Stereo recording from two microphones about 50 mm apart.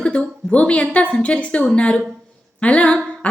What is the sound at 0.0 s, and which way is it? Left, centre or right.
A woman's voice, left.